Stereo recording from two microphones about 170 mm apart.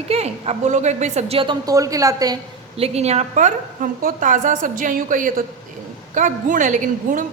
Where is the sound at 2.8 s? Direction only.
35° right (ahead or behind).